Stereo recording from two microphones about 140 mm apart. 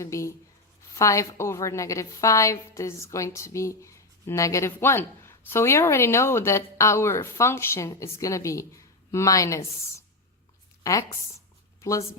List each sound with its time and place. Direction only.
0.0 s a woman's voice: 20° left (ahead or behind)
10.8 s a woman's voice: 25° left (ahead or behind)